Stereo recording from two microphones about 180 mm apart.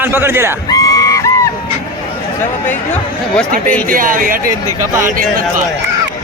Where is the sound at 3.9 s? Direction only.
50° right (ahead or behind).